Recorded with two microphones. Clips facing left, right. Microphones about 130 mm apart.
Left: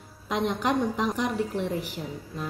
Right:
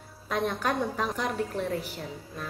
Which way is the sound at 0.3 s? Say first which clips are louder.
Left 2 dB; 15° left (ahead or behind).